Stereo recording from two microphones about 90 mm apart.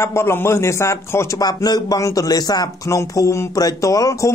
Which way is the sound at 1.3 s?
50° left (ahead or behind).